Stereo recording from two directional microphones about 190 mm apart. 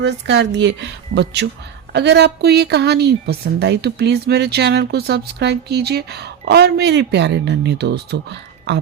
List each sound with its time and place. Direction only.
0.0 s a woman's voice: 65° right (ahead or behind)